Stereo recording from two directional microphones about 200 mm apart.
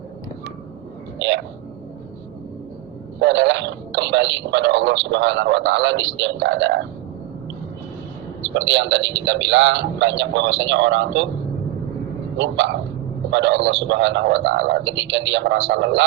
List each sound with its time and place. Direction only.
3.2 s speech: 65° right (ahead or behind)
8.4 s a man's voice: 65° right (ahead or behind)
12.4 s a man's voice: 65° right (ahead or behind)